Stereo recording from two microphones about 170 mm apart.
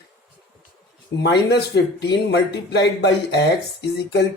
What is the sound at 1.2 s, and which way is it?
Speech, 80° left.